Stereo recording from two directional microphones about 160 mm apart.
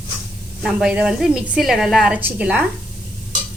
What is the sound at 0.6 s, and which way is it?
A woman's voice, 5° right (ahead or behind).